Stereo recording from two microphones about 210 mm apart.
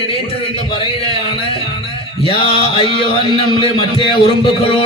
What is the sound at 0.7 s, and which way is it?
Speech, 25° left (ahead or behind).